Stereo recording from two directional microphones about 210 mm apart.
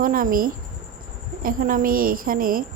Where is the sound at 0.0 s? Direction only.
40° right (ahead or behind).